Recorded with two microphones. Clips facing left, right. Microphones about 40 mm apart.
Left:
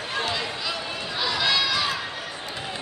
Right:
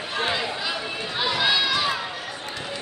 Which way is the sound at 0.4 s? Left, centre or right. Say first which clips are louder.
Right 2 dB; centre.